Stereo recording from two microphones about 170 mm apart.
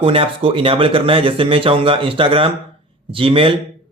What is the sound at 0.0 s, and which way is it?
Speech, 30° right (ahead or behind).